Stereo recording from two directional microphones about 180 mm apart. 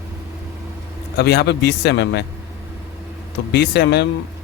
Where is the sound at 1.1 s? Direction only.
65° left (ahead or behind).